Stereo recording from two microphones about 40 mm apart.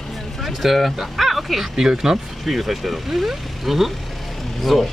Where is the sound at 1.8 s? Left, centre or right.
Centre.